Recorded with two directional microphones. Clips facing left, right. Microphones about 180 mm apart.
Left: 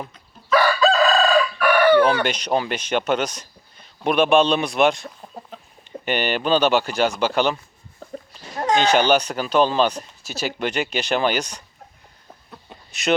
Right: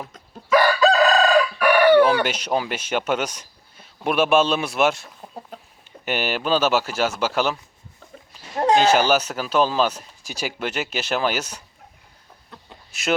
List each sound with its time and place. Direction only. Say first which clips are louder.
0.5 s chicken: right 1 dB; 15° right (ahead or behind)
2.0 s speech: right 1 dB; 5° right (ahead or behind)
6.1 s speech: left 2 dB; 5° right (ahead or behind)
8.5 s a sound: right 3 dB; 35° right (ahead or behind)
8.8 s speech: even; 5° right (ahead or behind)
12.9 s speech: left 2 dB; 5° right (ahead or behind)